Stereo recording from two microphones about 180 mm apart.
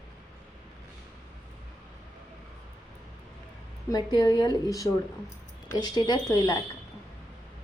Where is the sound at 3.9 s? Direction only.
20° left (ahead or behind).